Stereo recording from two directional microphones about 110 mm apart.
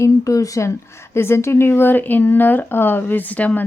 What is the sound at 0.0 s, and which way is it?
A woman's voice, 30° left (ahead or behind).